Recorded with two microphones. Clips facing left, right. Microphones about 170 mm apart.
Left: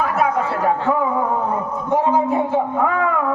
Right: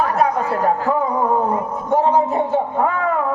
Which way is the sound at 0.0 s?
40° right (ahead or behind).